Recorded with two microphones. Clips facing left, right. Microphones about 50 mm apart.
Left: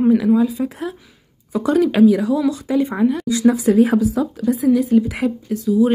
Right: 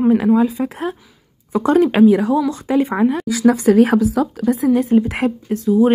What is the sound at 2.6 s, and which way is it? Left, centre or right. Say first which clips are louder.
Speech: right 2 dB; right.